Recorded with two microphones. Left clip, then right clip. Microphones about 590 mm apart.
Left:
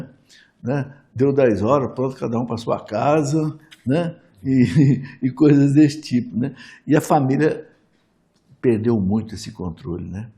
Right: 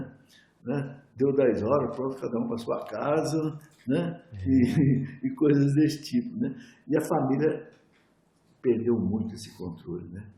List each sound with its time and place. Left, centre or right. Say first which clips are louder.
0.3 s a man's voice: left 9 dB; left
4.5 s a man's voice: left 6 dB; left
8.6 s a man's voice: left 6 dB; left